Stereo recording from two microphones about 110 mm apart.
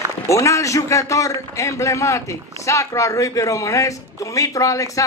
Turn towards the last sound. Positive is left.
turn(degrees=30)  # may be behind; listen again after turning